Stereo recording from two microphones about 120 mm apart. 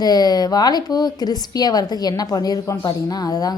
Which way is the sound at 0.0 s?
35° left (ahead or behind).